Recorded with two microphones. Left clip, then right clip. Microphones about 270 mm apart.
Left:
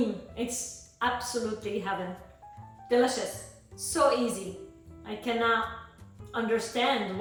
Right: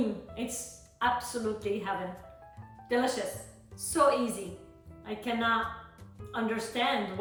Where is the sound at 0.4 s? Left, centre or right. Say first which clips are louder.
Left 4 dB; centre.